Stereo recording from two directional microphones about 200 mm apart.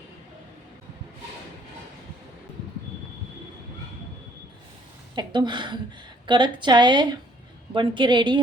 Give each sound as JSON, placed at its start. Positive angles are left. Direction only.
{"t": 5.1, "sound": "a woman's voice", "side_deg": -20}